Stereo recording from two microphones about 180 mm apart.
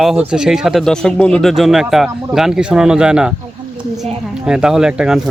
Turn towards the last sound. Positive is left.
turn(degrees=-5)  # may be behind; listen again after turning